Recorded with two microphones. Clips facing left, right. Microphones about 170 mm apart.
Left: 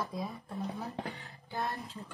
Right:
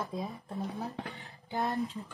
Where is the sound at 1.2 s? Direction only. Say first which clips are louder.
Right 3 dB; 20° right (ahead or behind).